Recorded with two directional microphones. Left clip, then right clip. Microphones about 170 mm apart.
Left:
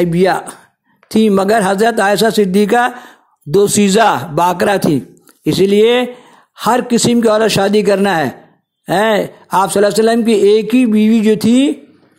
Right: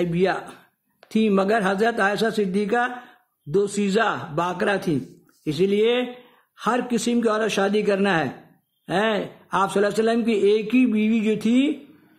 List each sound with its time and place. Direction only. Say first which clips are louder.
0.0 s a man's voice: left 10 dB; 35° left (ahead or behind)